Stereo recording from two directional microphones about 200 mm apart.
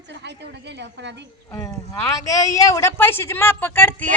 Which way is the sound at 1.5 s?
15° left (ahead or behind).